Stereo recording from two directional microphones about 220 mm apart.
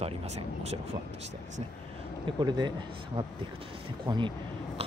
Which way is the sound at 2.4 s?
20° right (ahead or behind).